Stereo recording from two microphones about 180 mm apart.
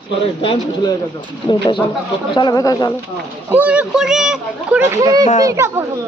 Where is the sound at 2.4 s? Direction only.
20° left (ahead or behind).